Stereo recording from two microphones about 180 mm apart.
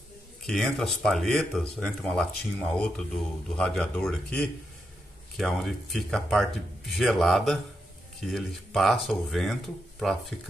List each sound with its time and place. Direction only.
0.5 s speech: 5° left (ahead or behind)